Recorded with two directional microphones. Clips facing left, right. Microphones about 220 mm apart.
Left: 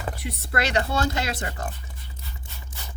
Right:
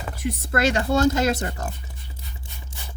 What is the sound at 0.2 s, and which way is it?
A woman's voice, 45° right (ahead or behind).